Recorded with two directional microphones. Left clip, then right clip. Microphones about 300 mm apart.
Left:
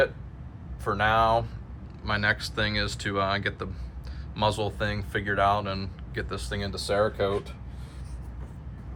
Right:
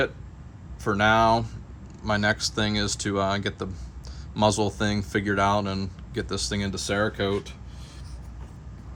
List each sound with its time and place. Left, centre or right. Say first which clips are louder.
0.9 s speech: right 3 dB; right